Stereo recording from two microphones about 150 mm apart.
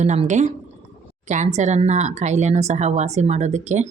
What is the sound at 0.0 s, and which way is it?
Speech, 50° right (ahead or behind).